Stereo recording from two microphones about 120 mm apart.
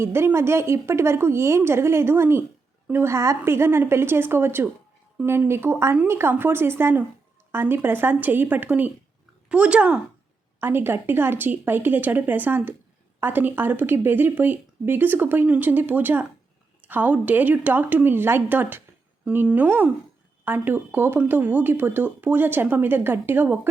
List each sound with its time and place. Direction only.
0.0 s a woman's voice: 20° right (ahead or behind)